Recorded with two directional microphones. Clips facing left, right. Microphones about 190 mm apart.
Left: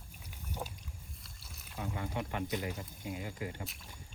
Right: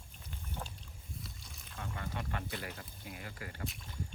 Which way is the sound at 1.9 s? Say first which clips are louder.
Left 3 dB; 15° left (ahead or behind).